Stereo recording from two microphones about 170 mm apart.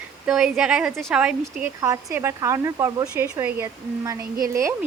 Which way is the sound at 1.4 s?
20° right (ahead or behind).